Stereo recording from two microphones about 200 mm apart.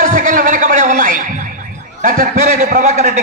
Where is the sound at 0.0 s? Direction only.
40° right (ahead or behind).